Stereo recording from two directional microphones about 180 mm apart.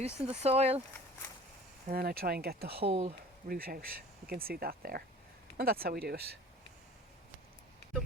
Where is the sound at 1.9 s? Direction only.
60° right (ahead or behind).